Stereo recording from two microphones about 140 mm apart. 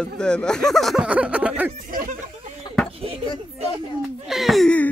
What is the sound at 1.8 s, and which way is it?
Speech, 80° right.